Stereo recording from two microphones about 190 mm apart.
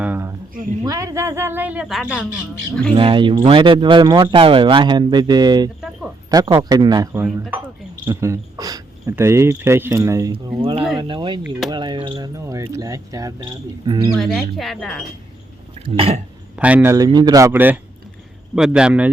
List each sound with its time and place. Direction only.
0.0 s a sound: 10° right (ahead or behind)
0.9 s speech: 15° right (ahead or behind); by 2.2 s 5° left (ahead or behind)
2.9 s speech: 25° right (ahead or behind)
10.3 s speech: 30° right (ahead or behind)
14.3 s speech: centre (ahead or behind)
15.9 s speech: 30° right (ahead or behind)
16.6 s speech: 10° right (ahead or behind)